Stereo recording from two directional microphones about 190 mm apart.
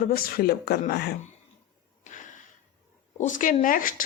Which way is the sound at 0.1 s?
55° left (ahead or behind).